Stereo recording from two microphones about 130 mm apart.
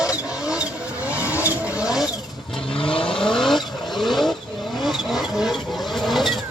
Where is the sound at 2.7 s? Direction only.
40° left (ahead or behind).